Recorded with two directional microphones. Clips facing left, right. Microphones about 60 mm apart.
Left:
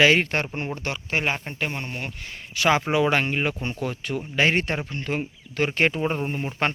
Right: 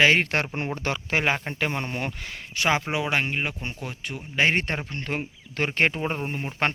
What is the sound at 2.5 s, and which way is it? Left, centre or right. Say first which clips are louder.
Speech: left 3 dB; right.